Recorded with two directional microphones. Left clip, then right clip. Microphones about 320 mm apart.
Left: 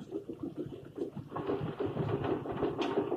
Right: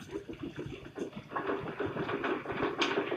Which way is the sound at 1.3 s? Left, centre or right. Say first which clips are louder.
Right 1 dB; right.